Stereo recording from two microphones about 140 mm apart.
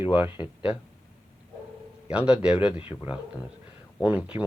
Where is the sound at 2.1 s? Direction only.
5° right (ahead or behind).